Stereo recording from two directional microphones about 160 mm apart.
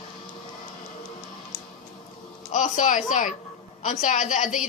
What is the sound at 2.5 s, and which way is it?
A woman's voice, 55° left (ahead or behind).